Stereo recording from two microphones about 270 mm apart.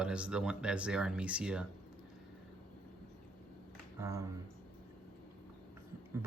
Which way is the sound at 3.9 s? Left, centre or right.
Centre.